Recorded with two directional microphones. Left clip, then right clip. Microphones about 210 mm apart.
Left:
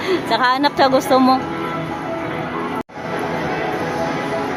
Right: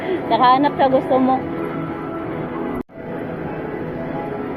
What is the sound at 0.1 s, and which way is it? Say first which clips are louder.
Speech: right 2 dB; 30° left (ahead or behind).